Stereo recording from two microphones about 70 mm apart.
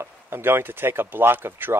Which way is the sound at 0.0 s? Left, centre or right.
Right.